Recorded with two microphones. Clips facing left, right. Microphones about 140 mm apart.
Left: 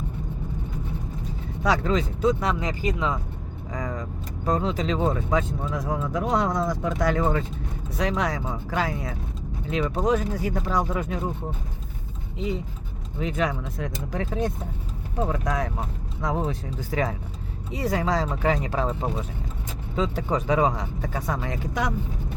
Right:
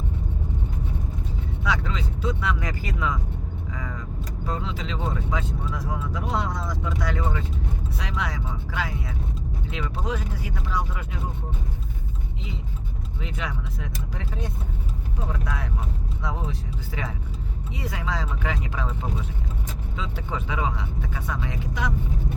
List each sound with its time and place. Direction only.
1.6 s speech: 40° left (ahead or behind)
2.6 s speech: 20° left (ahead or behind)
3.7 s vehicle: 40° left (ahead or behind)
4.4 s speech: 45° left (ahead or behind)
13.1 s speech: 45° left (ahead or behind)